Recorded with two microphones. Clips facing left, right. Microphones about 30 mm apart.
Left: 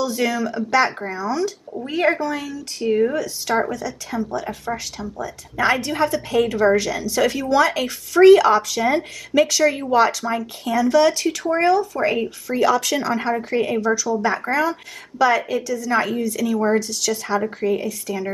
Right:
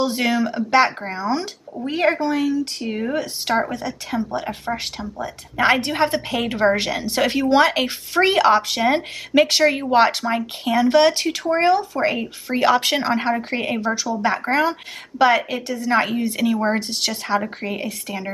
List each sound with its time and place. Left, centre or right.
0.0 s speech: right
2.0 s speech: right
2.9 s speech: centre
3.7 s speech: right